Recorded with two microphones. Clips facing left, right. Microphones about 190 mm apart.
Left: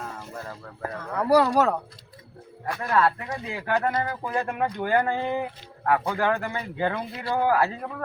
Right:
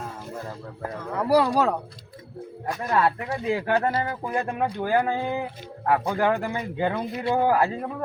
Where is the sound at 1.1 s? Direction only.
10° right (ahead or behind).